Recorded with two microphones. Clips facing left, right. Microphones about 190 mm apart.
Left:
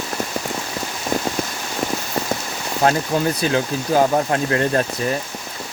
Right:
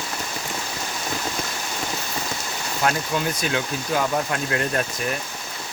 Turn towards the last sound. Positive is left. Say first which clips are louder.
# left 6 dB
turn(degrees=30)  # may be behind; listen again after turning